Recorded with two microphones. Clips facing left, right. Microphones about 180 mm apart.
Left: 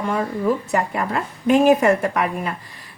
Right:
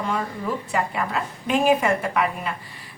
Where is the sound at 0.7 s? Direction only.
45° left (ahead or behind).